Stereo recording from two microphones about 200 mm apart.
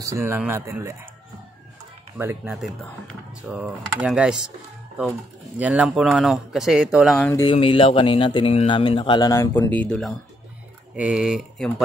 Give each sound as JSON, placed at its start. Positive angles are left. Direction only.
{"t": 0.0, "sound": "speech", "side_deg": -15}
{"t": 2.1, "sound": "speech", "side_deg": -10}
{"t": 5.6, "sound": "speech", "side_deg": -5}
{"t": 7.2, "sound": "speech", "side_deg": 10}
{"t": 7.4, "sound": "speech", "side_deg": 30}